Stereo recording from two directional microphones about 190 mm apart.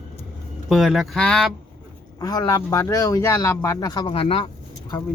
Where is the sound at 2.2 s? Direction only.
20° left (ahead or behind).